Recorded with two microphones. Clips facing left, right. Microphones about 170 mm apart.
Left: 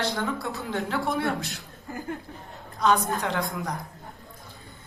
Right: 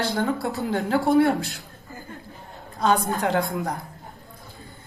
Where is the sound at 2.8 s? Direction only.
30° right (ahead or behind).